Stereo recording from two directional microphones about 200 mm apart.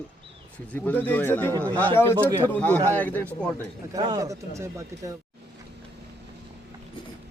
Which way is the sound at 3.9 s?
20° right (ahead or behind).